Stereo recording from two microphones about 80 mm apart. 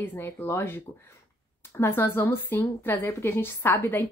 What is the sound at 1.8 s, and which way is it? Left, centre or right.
A woman's voice, left.